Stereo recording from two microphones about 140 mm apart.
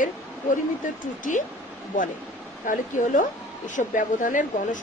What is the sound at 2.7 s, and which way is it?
Speech, 65° left (ahead or behind).